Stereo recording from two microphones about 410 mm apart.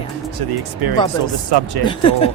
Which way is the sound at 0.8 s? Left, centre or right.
Right.